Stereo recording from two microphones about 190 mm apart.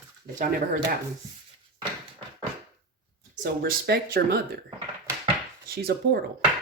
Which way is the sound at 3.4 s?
55° right (ahead or behind).